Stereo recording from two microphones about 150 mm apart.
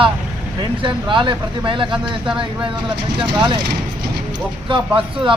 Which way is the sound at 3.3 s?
30° right (ahead or behind).